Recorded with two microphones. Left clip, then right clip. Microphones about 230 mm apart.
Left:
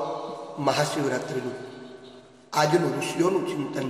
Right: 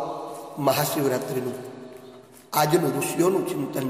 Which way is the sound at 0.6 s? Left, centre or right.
Right.